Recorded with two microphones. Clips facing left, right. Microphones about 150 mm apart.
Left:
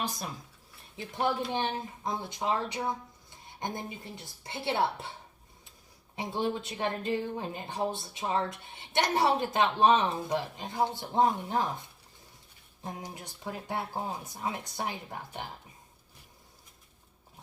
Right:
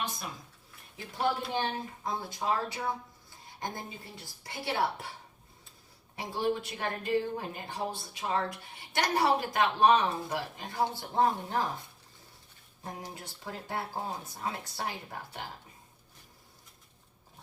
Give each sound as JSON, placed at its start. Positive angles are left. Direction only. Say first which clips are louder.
{"t": 1.5, "sound": "a woman's voice", "louder": "left 1 dB", "side_deg": 20}
{"t": 6.1, "sound": "a woman's voice", "louder": "even", "side_deg": 20}
{"t": 12.8, "sound": "speech", "louder": "left 1 dB", "side_deg": 20}